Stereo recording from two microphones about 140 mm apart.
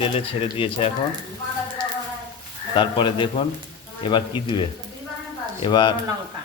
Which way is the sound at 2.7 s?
35° left (ahead or behind).